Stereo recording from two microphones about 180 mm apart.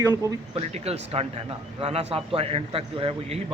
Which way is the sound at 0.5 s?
35° right (ahead or behind).